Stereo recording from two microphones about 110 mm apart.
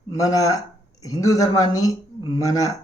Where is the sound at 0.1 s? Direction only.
35° left (ahead or behind).